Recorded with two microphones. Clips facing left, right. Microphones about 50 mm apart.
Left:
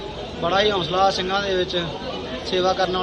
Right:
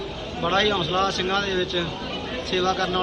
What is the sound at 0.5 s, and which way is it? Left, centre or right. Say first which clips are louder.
A man's voice: left 2 dB; right.